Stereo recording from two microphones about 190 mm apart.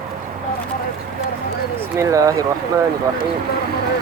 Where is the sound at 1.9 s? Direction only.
15° right (ahead or behind).